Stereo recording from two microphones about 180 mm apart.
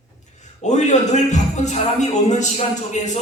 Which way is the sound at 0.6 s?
40° left (ahead or behind).